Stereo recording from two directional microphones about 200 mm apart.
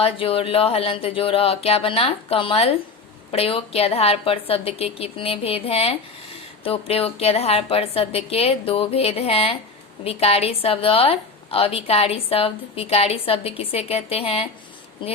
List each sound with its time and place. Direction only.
0.0 s a woman's voice: 30° left (ahead or behind)